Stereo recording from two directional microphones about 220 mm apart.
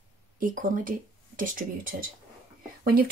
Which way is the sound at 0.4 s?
35° right (ahead or behind).